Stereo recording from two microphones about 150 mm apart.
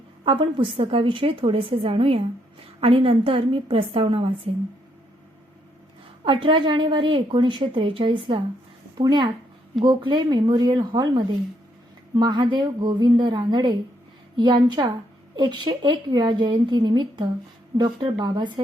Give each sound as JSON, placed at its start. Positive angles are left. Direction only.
{"t": 0.3, "sound": "a woman's voice", "side_deg": -35}
{"t": 6.2, "sound": "a woman's voice", "side_deg": -35}